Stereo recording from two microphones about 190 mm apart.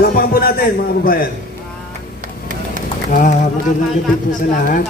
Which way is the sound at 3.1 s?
45° left (ahead or behind).